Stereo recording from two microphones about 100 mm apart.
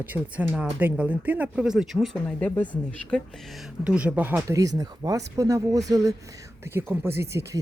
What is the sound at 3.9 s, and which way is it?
Speech, 15° right (ahead or behind).